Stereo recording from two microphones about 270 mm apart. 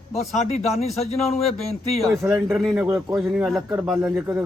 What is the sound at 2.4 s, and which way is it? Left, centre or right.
Speech, centre.